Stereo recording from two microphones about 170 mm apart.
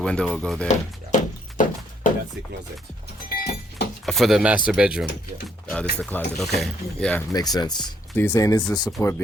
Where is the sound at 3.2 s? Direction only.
70° left (ahead or behind).